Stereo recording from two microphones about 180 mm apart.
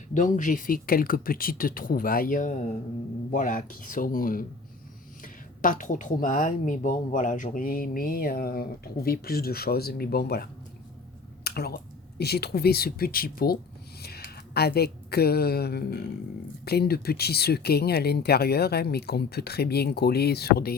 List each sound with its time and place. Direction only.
0.1 s a woman's voice: 45° left (ahead or behind)